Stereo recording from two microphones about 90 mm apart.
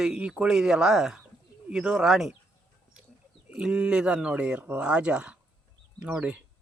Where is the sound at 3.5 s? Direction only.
10° right (ahead or behind).